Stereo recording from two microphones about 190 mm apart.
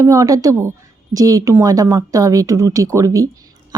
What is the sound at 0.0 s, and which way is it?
A woman's voice, 15° right (ahead or behind).